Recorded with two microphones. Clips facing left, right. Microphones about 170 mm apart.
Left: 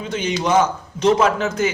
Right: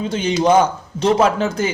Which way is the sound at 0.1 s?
30° right (ahead or behind).